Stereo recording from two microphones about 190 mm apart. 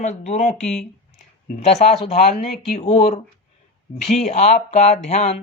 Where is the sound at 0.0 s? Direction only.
35° left (ahead or behind).